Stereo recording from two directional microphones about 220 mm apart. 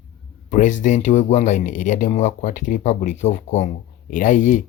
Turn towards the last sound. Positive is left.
turn(degrees=35)  # may be behind; listen again after turning